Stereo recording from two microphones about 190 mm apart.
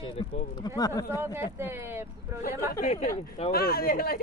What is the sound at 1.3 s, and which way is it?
A woman's voice, 10° right (ahead or behind).